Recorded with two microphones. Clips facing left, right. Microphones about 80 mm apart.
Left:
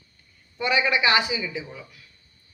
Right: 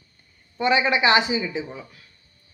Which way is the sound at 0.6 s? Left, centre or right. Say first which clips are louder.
Right 3 dB; right.